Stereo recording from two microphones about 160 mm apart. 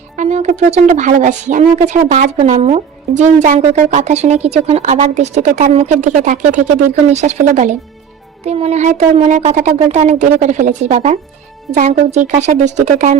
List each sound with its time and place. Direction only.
0.2 s speech: 45° right (ahead or behind)